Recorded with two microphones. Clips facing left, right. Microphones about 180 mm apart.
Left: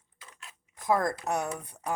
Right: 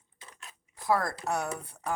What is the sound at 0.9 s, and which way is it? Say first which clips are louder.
Speech: left 1 dB; 20° left (ahead or behind).